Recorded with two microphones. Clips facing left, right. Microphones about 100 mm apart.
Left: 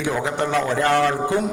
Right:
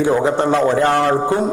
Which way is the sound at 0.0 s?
30° right (ahead or behind).